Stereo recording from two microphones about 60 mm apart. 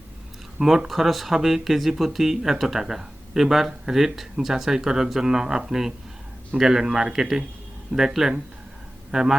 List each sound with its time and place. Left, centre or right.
0.6 s speech: centre